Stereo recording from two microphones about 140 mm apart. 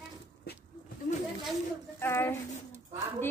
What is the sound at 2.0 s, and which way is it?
Speech, 15° left (ahead or behind).